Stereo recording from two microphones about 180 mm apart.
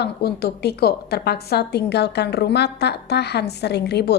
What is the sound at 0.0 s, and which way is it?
A woman's voice, 60° left (ahead or behind).